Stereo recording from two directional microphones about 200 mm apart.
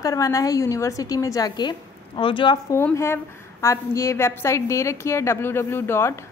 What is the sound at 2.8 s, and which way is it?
A woman's voice, 10° left (ahead or behind).